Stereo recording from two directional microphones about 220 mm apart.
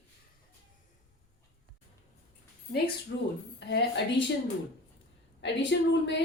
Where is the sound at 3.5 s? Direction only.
50° left (ahead or behind).